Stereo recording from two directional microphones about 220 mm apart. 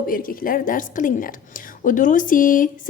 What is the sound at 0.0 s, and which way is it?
A woman's voice, 40° left (ahead or behind).